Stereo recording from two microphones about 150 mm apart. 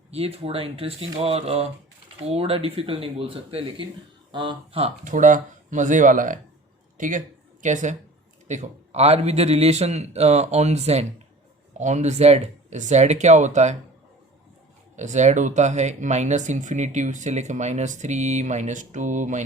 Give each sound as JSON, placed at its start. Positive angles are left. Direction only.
{"t": 0.1, "sound": "speech", "side_deg": -40}
{"t": 5.0, "sound": "speech", "side_deg": -55}
{"t": 14.9, "sound": "speech", "side_deg": -50}